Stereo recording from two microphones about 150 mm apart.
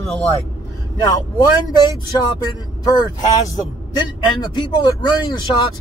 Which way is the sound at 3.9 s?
30° left (ahead or behind).